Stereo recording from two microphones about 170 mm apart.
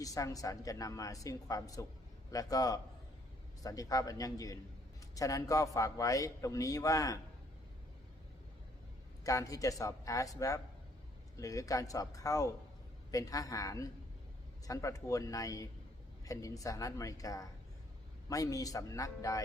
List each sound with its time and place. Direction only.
0.0 s a man's voice: 20° left (ahead or behind)
9.2 s a man's voice: 20° left (ahead or behind)